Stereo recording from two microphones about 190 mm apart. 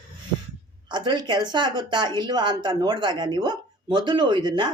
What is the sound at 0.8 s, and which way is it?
Speech, 25° right (ahead or behind).